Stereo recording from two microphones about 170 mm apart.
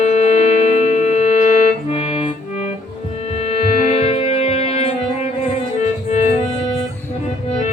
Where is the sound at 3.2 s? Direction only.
40° left (ahead or behind).